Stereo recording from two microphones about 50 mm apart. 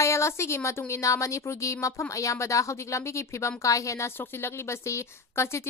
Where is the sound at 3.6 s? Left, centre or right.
Left.